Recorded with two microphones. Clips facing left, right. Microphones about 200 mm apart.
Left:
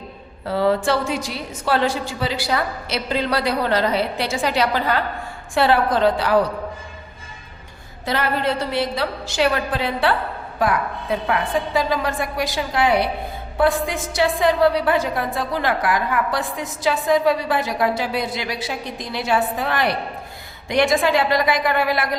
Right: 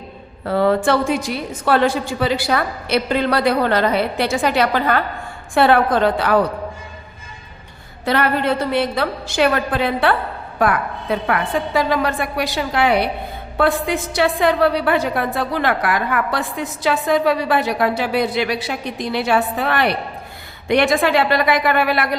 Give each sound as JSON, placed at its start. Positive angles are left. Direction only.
{"t": 0.4, "sound": "a woman's voice", "side_deg": -55}
{"t": 8.0, "sound": "a woman's voice", "side_deg": -60}